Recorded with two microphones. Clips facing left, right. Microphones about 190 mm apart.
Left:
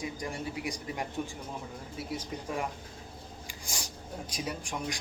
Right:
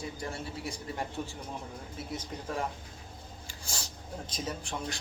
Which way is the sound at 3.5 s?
15° left (ahead or behind).